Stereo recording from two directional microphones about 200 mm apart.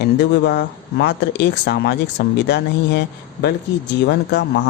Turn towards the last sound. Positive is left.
turn(degrees=60)  # may be behind; listen again after turning